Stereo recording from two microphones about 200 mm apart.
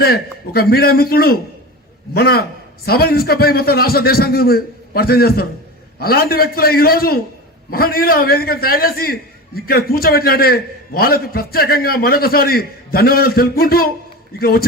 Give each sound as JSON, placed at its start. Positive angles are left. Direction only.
{"t": 0.0, "sound": "a man's voice", "side_deg": 50}